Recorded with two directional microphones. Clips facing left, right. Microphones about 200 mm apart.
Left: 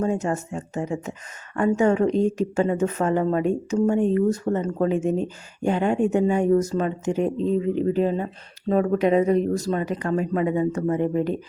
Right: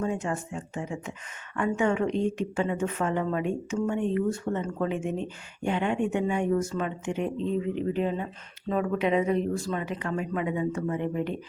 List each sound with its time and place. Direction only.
0.0 s speech: 40° left (ahead or behind)